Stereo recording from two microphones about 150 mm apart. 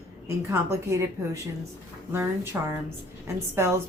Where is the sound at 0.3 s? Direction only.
20° right (ahead or behind).